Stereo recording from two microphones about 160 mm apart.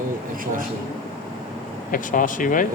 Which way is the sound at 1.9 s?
55° left (ahead or behind).